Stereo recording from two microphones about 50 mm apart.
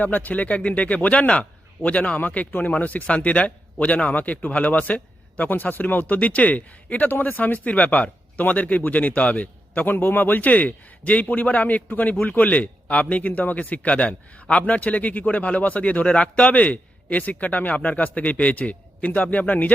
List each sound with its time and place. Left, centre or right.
0.0 s speech: left